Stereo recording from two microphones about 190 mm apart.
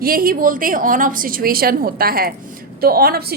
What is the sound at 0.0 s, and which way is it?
A woman's voice, 50° right (ahead or behind).